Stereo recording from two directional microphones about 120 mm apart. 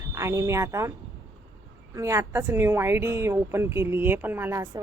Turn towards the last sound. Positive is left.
turn(degrees=-20)  # may be behind; listen again after turning